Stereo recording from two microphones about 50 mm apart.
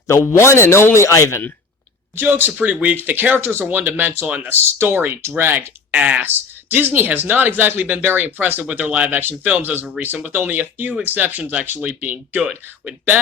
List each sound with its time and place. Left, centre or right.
0.1 s speech: left
0.9 s speech: left
2.1 s speech: right
4.4 s speech: right
5.9 s speech: right
6.2 s speech: right
8.8 s speech: right
9.0 s speech: right